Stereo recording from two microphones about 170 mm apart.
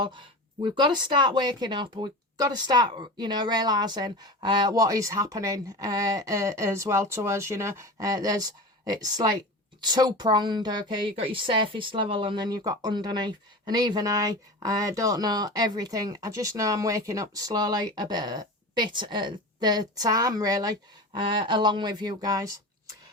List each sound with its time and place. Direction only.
0.0 s a woman's voice: 30° right (ahead or behind)